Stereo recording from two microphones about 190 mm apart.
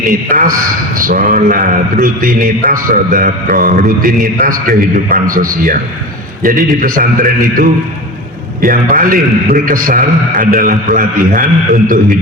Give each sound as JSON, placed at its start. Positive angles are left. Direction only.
{"t": 0.1, "sound": "a man's voice", "side_deg": -45}